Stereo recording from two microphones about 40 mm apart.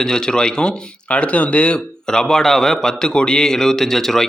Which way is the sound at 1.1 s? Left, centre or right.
Left.